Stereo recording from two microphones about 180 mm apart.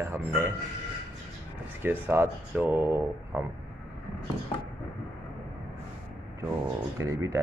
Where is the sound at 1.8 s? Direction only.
10° right (ahead or behind).